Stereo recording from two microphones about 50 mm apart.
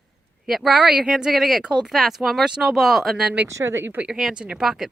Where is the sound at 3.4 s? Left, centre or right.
Right.